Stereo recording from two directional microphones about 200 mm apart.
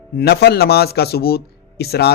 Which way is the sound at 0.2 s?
50° left (ahead or behind).